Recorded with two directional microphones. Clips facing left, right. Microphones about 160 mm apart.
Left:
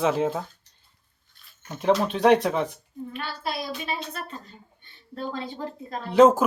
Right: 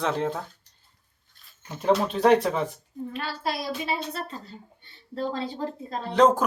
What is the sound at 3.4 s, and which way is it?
A woman's voice, 30° right (ahead or behind).